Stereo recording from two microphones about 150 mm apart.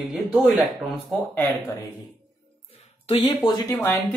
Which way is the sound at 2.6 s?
40° left (ahead or behind).